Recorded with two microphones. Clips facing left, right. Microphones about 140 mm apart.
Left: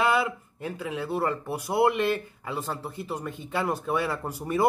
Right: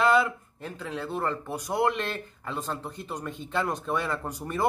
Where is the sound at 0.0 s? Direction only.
5° left (ahead or behind).